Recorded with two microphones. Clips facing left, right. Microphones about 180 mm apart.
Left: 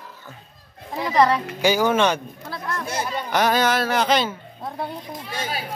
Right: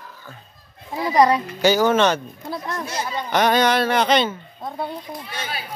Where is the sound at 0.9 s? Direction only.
10° right (ahead or behind).